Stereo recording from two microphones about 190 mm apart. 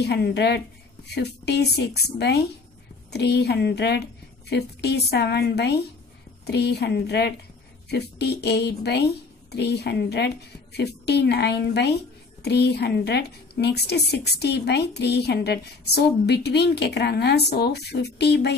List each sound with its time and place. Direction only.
0.0 s a woman's voice: 60° left (ahead or behind)